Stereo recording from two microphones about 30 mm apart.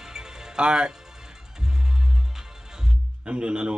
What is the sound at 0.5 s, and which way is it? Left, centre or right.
Speech, right.